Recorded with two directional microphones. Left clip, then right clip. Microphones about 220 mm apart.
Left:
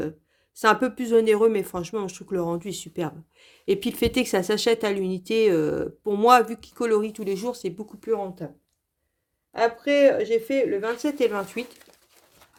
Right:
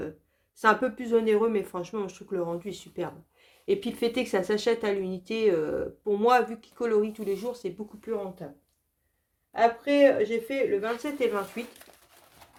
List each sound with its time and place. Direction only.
0.5 s speech: 50° left (ahead or behind)
9.5 s speech: 50° left (ahead or behind)